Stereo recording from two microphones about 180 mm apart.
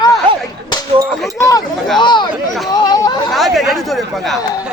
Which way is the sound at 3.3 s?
Centre (ahead or behind).